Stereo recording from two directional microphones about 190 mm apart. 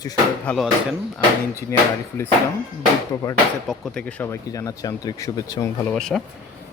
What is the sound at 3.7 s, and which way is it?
Speech, 5° left (ahead or behind).